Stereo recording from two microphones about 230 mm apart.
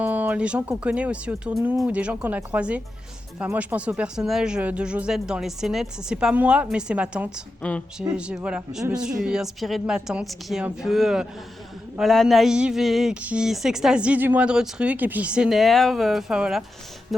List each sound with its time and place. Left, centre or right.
0.0 s speech: centre
7.6 s speech: centre